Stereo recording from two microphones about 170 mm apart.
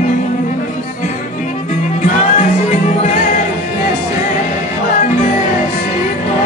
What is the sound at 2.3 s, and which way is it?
Music, 45° left (ahead or behind).